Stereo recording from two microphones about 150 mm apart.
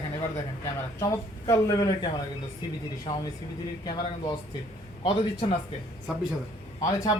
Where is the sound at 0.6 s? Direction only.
25° left (ahead or behind).